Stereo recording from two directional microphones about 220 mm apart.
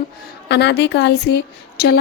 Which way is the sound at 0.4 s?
50° left (ahead or behind).